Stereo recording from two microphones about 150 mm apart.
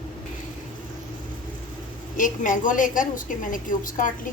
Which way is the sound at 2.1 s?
60° left (ahead or behind).